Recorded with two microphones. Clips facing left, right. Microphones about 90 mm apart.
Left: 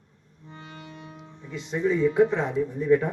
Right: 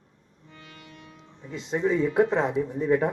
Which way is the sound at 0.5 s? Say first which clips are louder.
Left 5 dB; 30° left (ahead or behind).